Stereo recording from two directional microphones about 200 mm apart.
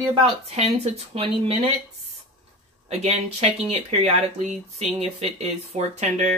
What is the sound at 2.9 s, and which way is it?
Speech, 30° right (ahead or behind).